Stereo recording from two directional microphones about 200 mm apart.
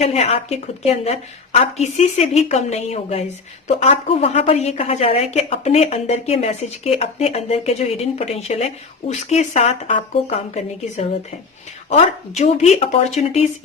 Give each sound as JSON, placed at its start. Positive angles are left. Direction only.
{"t": 0.0, "sound": "a woman's voice", "side_deg": 30}